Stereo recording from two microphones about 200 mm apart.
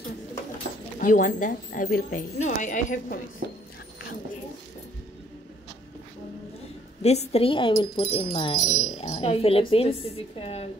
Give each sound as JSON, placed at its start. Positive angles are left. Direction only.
{"t": 0.9, "sound": "speech", "side_deg": 40}
{"t": 7.0, "sound": "speech", "side_deg": 30}